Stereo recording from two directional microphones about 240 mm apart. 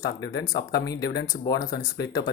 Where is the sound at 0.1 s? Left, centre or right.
Left.